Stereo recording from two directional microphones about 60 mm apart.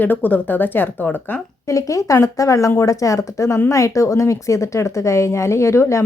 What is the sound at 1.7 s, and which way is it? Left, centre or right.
A woman's voice, left.